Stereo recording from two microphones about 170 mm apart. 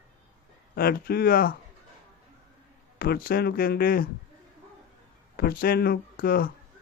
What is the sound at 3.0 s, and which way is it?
Speech, 60° left (ahead or behind).